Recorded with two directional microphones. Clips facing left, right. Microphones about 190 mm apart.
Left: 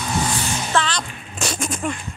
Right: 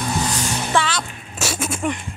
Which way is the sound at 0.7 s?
10° right (ahead or behind).